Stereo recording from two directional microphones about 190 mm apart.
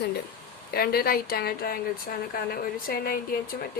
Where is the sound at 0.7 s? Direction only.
55° left (ahead or behind).